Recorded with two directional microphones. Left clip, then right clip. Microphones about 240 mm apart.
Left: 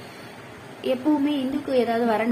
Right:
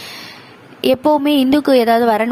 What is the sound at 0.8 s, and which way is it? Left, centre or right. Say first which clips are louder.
A woman's voice: right 10 dB; right.